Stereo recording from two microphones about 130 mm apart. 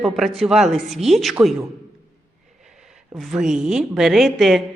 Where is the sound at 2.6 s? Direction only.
5° right (ahead or behind).